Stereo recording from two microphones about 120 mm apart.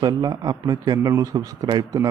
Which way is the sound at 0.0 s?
35° right (ahead or behind).